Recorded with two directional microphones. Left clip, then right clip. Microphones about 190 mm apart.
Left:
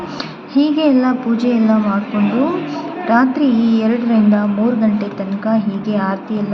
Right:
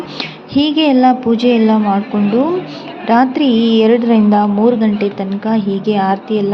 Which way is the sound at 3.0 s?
30° right (ahead or behind).